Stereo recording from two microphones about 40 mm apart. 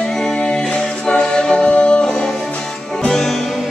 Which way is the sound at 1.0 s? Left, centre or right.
Left.